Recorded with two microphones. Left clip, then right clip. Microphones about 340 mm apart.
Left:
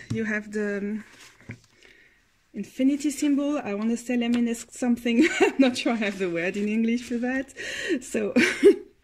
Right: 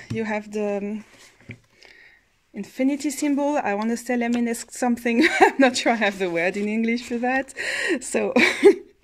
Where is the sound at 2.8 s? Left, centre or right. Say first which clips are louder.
Right 1 dB; centre.